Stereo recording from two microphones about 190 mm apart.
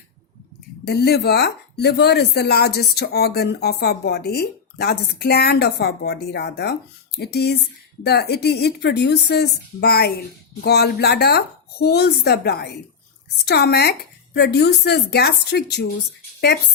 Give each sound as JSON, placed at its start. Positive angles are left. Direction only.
{"t": 0.9, "sound": "speech", "side_deg": 55}